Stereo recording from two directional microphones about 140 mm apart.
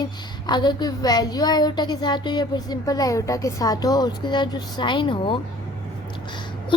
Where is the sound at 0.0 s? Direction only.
30° left (ahead or behind).